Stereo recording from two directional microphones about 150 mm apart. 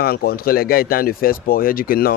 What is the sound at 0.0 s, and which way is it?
A man's voice, 90° left.